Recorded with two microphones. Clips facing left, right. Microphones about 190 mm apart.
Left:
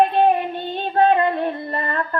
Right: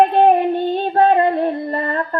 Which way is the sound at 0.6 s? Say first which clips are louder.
Right 3 dB; 45° right (ahead or behind).